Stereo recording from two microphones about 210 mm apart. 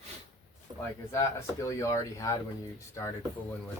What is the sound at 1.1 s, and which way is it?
Speech, 15° left (ahead or behind).